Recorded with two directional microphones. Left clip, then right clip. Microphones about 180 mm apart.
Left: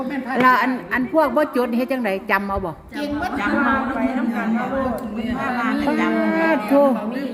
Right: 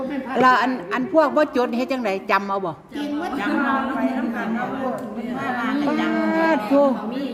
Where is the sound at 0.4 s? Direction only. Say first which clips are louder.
Even; 10° left (ahead or behind).